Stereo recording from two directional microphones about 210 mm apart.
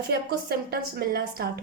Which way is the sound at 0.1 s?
50° right (ahead or behind).